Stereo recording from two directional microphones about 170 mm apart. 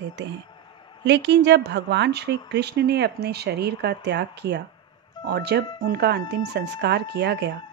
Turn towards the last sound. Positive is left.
turn(degrees=-80)